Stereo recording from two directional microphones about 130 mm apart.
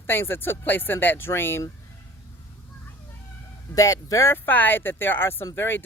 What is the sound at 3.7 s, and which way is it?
Speech, 25° left (ahead or behind).